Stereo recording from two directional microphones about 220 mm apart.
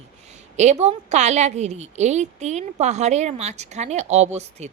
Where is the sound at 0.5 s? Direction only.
30° right (ahead or behind).